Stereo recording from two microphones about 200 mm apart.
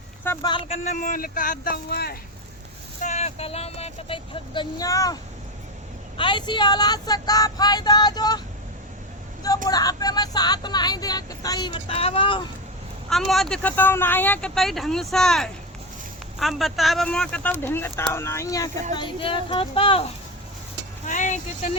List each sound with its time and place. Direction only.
0.3 s speech: 20° left (ahead or behind); by 2.1 s 50° left (ahead or behind)
3.0 s speech: 35° left (ahead or behind)
9.6 s speech: 20° left (ahead or behind)
13.1 s speech: centre (ahead or behind)
18.9 s speech: 25° left (ahead or behind)
21.0 s vehicle: 40° left (ahead or behind)